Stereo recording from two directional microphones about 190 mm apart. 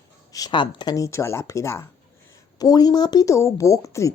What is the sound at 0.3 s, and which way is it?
Speech, 20° left (ahead or behind).